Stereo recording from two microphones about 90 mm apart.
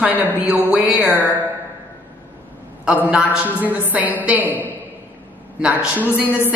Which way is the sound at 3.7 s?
20° right (ahead or behind).